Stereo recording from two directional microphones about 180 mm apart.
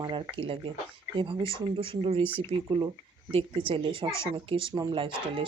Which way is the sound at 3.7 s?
30° right (ahead or behind).